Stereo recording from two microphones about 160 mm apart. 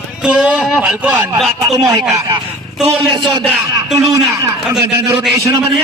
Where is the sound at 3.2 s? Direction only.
Centre (ahead or behind).